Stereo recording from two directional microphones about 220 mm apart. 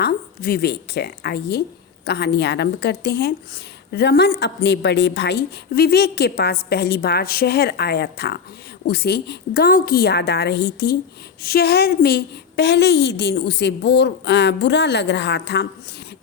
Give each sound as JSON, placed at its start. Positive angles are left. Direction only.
{"t": 0.0, "sound": "a woman's voice", "side_deg": 45}